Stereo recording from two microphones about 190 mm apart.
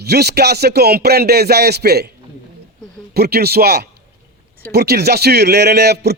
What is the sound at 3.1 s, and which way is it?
A man's voice, 55° right (ahead or behind).